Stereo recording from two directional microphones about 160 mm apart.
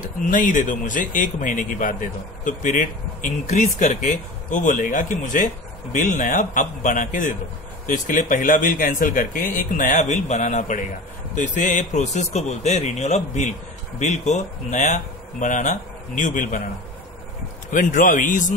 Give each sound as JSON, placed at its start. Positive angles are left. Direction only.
{"t": 0.0, "sound": "speech", "side_deg": 55}
{"t": 17.6, "sound": "speech", "side_deg": 55}